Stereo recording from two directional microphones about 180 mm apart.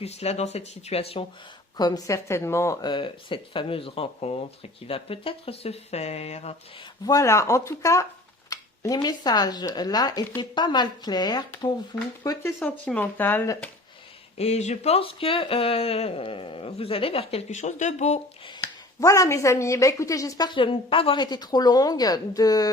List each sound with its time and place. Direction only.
0.0 s speech: 35° left (ahead or behind)
1.8 s a woman's voice: 20° left (ahead or behind); by 6.6 s 35° left (ahead or behind)
7.0 s a woman's voice: 20° left (ahead or behind)
12.5 s speech: 5° left (ahead or behind)
14.3 s speech: 35° left (ahead or behind)
18.9 s a woman's voice: 15° left (ahead or behind)